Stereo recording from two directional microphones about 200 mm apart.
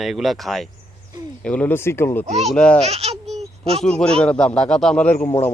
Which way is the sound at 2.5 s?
5° left (ahead or behind).